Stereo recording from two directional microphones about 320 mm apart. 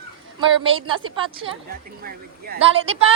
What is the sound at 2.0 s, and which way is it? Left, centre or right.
Speech, right.